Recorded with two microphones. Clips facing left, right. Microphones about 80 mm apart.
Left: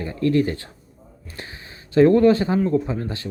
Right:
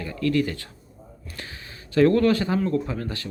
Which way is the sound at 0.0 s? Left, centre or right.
Left.